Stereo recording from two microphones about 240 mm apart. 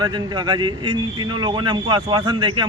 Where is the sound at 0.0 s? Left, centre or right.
Centre.